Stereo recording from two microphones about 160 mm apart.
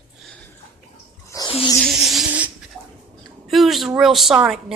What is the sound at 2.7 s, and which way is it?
Bird, 5° right (ahead or behind).